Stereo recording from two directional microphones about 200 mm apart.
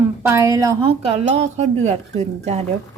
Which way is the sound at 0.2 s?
15° right (ahead or behind).